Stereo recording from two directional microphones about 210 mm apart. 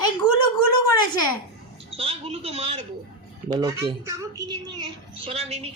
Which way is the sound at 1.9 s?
25° right (ahead or behind).